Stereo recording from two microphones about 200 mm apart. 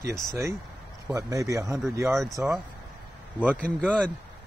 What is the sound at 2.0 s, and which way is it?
Speech, centre (ahead or behind).